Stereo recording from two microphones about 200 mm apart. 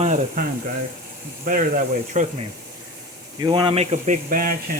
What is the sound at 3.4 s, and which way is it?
Speech, 20° right (ahead or behind).